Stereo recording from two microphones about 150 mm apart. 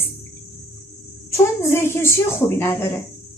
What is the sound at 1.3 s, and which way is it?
A woman's voice, 15° left (ahead or behind).